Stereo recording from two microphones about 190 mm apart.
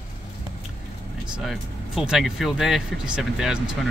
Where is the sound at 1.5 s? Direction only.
Centre (ahead or behind).